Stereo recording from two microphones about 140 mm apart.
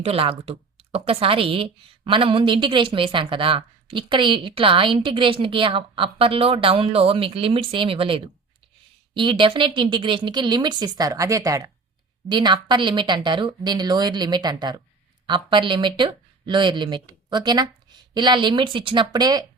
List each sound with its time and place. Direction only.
0.0 s a woman's voice: 45° right (ahead or behind)